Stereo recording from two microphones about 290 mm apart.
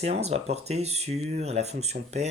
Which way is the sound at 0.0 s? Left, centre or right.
Right.